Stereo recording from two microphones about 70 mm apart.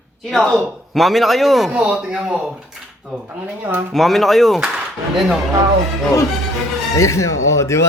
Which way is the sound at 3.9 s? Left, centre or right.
Centre.